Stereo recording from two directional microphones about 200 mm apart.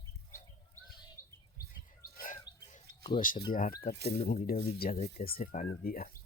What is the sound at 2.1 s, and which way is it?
Chirp, 40° left (ahead or behind).